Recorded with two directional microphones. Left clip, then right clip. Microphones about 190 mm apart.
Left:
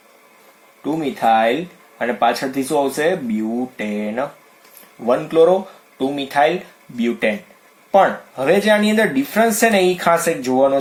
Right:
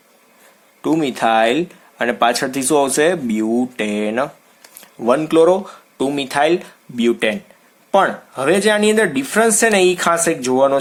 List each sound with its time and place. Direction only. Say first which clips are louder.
0.8 s speech: right 3 dB; 55° right (ahead or behind)